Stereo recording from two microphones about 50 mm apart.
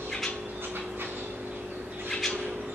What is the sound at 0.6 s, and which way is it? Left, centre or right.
Dog, right.